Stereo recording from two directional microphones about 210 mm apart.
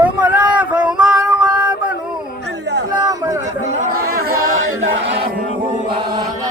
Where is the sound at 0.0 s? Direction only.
5° right (ahead or behind).